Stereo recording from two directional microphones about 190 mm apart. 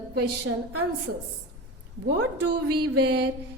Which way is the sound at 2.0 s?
55° right (ahead or behind).